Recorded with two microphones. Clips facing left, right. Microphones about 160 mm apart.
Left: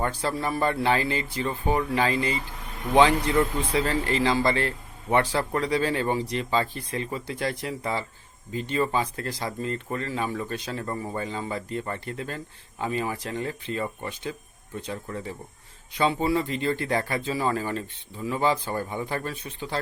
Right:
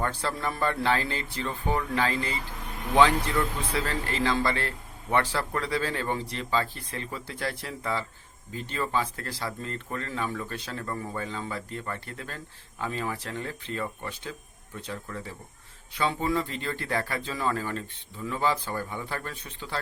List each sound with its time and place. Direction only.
0.0 s a man's voice: 15° left (ahead or behind)
16.0 s a man's voice: 15° left (ahead or behind)